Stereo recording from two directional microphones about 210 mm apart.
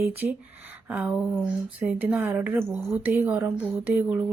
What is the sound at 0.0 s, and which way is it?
A woman's voice, 10° right (ahead or behind).